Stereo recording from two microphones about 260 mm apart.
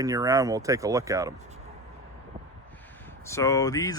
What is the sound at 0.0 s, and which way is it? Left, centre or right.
Speech, centre.